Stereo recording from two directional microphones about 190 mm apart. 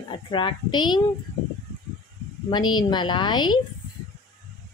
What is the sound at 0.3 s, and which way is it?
Speech, 25° left (ahead or behind).